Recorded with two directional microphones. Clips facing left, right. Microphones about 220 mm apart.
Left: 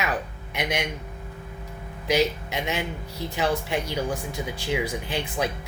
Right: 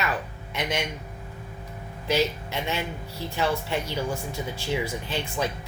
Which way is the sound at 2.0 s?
15° left (ahead or behind).